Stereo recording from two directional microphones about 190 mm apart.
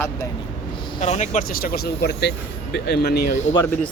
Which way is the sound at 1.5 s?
50° left (ahead or behind).